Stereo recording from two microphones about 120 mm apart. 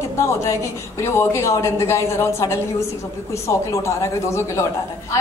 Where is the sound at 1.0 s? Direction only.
20° left (ahead or behind).